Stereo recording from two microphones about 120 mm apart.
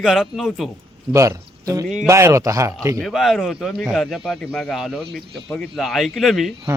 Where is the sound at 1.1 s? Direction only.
25° right (ahead or behind).